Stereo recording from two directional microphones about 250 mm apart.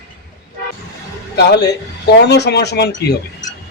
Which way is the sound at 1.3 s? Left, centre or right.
Left.